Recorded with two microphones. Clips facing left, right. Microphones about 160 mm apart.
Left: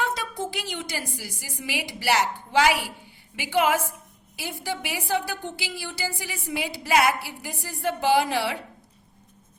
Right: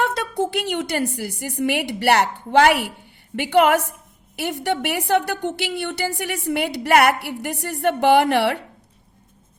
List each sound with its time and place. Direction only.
0.0 s a woman's voice: 65° right (ahead or behind)